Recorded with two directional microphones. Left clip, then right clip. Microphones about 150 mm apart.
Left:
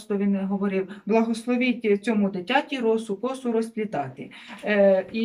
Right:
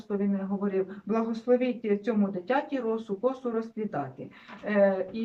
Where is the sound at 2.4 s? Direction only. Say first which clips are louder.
Left 6 dB; 10° left (ahead or behind).